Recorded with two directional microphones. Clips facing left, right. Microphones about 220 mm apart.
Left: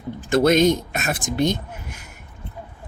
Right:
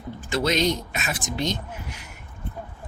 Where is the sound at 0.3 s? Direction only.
50° left (ahead or behind).